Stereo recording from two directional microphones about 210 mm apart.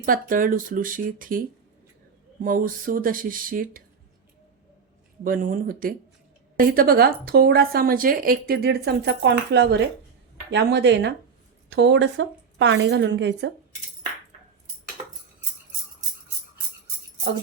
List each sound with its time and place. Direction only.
0.0 s speech: 40° right (ahead or behind)
5.2 s a woman's voice: 40° right (ahead or behind); by 13.5 s 55° right (ahead or behind)